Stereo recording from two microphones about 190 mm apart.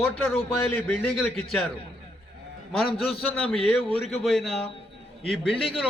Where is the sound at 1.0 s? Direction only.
5° left (ahead or behind).